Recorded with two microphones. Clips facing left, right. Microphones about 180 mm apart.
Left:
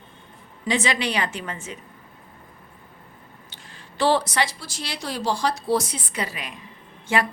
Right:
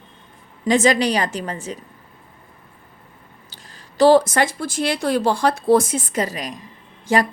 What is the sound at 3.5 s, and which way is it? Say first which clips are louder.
A woman's voice: right 7 dB; 40° right (ahead or behind).